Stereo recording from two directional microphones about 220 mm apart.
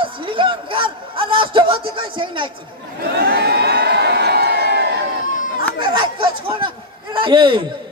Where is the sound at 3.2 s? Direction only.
45° right (ahead or behind).